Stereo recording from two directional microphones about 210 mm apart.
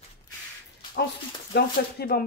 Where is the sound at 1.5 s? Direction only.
50° left (ahead or behind).